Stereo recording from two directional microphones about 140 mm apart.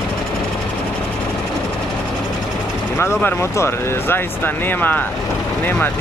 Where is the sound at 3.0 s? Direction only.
15° left (ahead or behind).